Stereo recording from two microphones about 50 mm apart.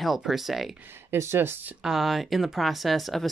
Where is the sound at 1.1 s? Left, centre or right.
Right.